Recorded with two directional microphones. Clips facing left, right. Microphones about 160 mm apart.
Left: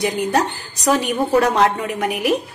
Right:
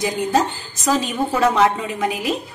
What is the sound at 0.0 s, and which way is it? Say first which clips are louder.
A woman's voice: even; 65° left (ahead or behind).